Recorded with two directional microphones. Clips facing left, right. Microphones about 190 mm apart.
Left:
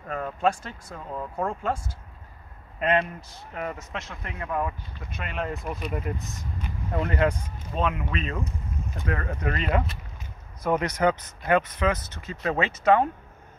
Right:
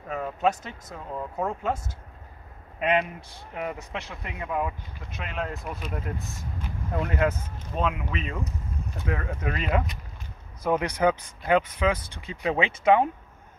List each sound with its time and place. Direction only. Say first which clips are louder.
0.1 s speech: even; 5° right (ahead or behind)
2.8 s speech: even; 10° right (ahead or behind)
6.1 s speech: even; 20° left (ahead or behind)
6.9 s speech: left 1 dB; centre (ahead or behind)